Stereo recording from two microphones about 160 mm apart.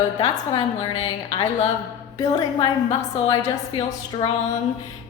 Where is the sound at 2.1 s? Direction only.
25° left (ahead or behind).